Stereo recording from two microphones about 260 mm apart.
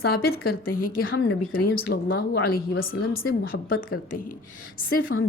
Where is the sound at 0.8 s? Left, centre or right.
Left.